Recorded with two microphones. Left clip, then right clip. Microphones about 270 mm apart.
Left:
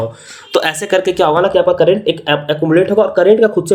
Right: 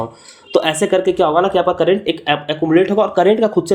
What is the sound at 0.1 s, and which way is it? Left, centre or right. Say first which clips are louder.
Speech: left 1 dB; centre.